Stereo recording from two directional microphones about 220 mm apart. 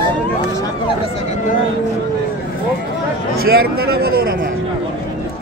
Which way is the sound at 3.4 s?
45° right (ahead or behind).